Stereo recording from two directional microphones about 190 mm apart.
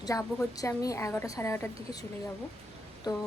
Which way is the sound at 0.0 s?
15° left (ahead or behind).